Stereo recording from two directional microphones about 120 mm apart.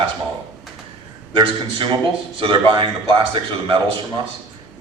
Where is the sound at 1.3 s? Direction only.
45° right (ahead or behind).